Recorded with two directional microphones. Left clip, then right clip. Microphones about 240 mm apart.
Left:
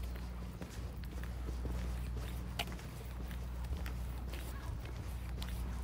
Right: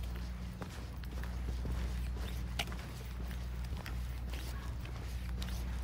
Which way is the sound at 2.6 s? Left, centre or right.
Centre.